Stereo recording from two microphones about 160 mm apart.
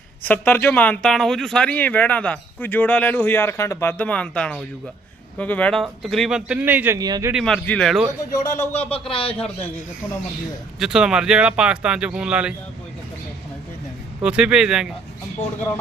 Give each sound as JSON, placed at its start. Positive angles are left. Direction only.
{"t": 0.2, "sound": "speech", "side_deg": 10}
{"t": 7.3, "sound": "speech", "side_deg": 5}
{"t": 8.4, "sound": "speech", "side_deg": 50}
{"t": 8.9, "sound": "speech", "side_deg": 35}
{"t": 10.8, "sound": "speech", "side_deg": -5}
{"t": 14.2, "sound": "speech", "side_deg": -5}